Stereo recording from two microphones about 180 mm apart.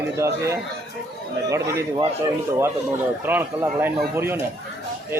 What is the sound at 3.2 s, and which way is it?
A man's voice, 10° right (ahead or behind).